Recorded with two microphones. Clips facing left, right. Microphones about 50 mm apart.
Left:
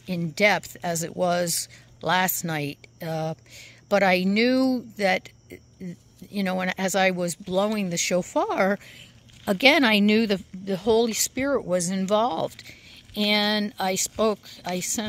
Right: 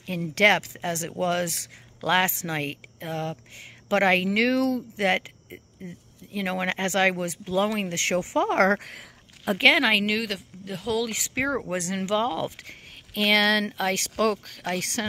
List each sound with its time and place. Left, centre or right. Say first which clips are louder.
0.0 s speech: right 1 dB; right
9.6 s speech: left 2 dB; centre
10.1 s speech: left 7 dB; centre
11.1 s speech: left 2 dB; centre
12.4 s speech: left 2 dB; right